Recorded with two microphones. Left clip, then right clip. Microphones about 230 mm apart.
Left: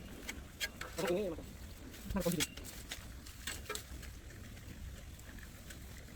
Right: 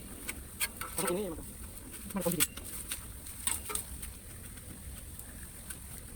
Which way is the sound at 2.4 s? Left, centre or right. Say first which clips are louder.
Right 4 dB; right.